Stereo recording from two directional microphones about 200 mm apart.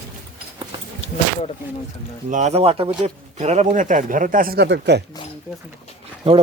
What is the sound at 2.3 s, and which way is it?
Speech, 35° right (ahead or behind).